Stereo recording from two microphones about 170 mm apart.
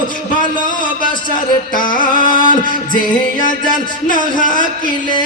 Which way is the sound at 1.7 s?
50° left (ahead or behind).